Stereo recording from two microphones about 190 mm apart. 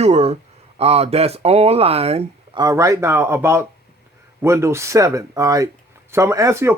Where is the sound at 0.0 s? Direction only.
35° right (ahead or behind).